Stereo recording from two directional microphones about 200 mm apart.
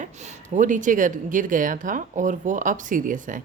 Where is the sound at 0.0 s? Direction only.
35° right (ahead or behind).